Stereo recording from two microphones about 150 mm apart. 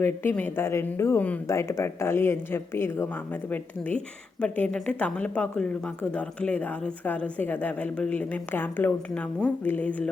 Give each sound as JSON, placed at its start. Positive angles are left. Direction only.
{"t": 0.0, "sound": "a woman's voice", "side_deg": 15}